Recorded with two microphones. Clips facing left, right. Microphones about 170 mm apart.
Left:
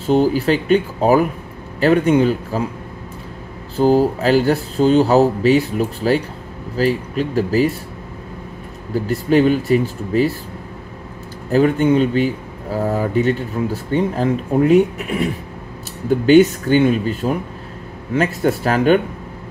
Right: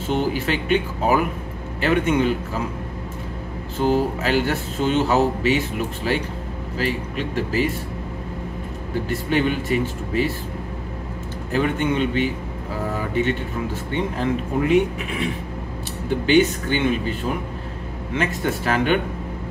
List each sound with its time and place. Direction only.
0.0 s speech: 40° left (ahead or behind)
3.7 s speech: 35° left (ahead or behind)
9.0 s speech: 40° left (ahead or behind)
11.5 s speech: 40° left (ahead or behind)
18.4 s speech: 40° left (ahead or behind)